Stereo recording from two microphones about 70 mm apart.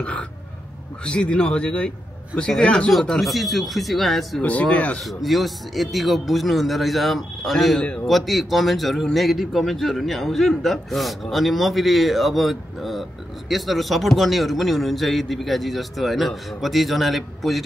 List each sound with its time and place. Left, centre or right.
0.0 s speech: centre
2.9 s speech: centre
4.4 s speech: centre
5.0 s speech: centre